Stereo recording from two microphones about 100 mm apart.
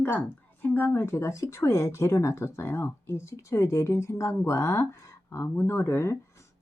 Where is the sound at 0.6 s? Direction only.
20° left (ahead or behind).